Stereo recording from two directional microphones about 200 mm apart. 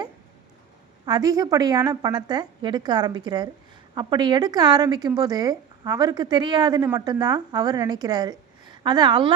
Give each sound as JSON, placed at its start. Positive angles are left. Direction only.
{"t": 1.0, "sound": "speech", "side_deg": -20}